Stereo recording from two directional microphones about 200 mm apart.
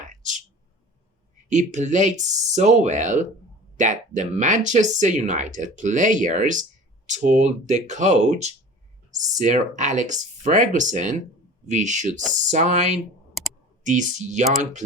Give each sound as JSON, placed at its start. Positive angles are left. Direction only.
{"t": 0.0, "sound": "a sound", "side_deg": -40}
{"t": 1.5, "sound": "speech", "side_deg": -35}
{"t": 13.8, "sound": "speech", "side_deg": -40}